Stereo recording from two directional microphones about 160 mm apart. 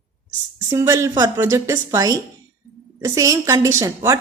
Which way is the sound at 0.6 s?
15° right (ahead or behind).